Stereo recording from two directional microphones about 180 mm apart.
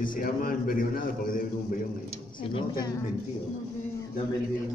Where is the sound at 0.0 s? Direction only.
50° left (ahead or behind).